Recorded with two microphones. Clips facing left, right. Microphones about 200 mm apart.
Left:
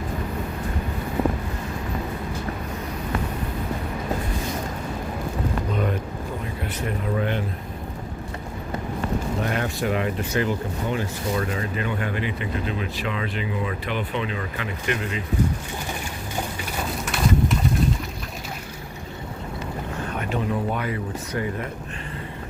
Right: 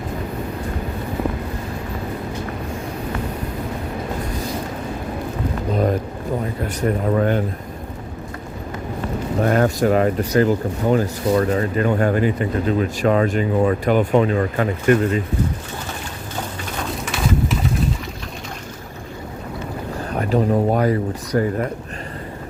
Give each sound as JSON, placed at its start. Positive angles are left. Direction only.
{"t": 5.7, "sound": "a sound", "side_deg": -35}
{"t": 6.6, "sound": "speech", "side_deg": -45}
{"t": 9.4, "sound": "speech", "side_deg": -45}
{"t": 16.7, "sound": "pigeon", "side_deg": 0}
{"t": 20.1, "sound": "speech", "side_deg": -35}